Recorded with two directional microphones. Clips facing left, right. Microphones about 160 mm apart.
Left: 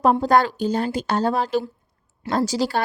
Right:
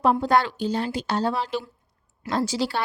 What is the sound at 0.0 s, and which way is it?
Speech, 40° left (ahead or behind).